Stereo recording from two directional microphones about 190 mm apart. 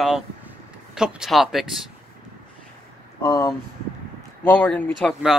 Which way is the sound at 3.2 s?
15° left (ahead or behind).